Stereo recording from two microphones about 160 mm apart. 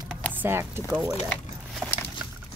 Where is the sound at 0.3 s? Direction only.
15° right (ahead or behind).